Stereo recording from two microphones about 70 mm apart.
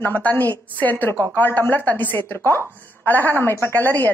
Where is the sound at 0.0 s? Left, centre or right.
Left.